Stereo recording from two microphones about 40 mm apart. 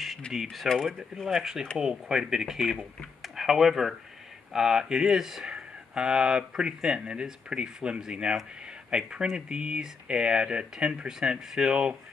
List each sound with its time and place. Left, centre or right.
0.3 s speech: centre
3.2 s a sound: centre
4.5 s speech: centre